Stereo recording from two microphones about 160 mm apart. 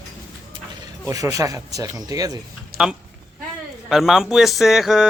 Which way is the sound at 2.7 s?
65° right (ahead or behind).